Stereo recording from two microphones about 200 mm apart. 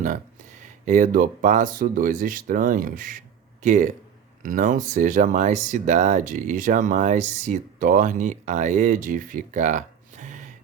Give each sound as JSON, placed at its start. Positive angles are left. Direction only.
{"t": 0.6, "sound": "speech", "side_deg": -40}